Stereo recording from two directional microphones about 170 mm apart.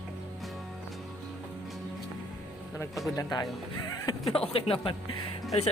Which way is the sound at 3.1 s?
20° left (ahead or behind).